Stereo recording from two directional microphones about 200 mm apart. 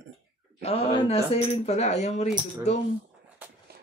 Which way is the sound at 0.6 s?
30° left (ahead or behind).